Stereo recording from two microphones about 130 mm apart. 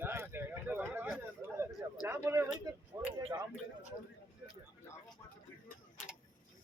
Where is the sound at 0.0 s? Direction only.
15° right (ahead or behind).